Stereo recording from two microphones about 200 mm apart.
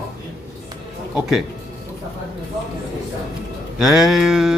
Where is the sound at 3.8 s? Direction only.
Centre (ahead or behind).